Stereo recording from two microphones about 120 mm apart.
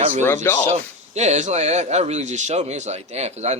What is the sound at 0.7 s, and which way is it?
Speech, 70° right (ahead or behind).